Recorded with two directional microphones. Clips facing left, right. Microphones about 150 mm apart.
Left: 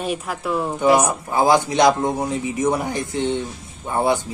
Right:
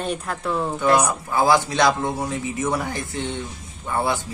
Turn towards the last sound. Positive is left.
turn(degrees=20)  # may be behind; listen again after turning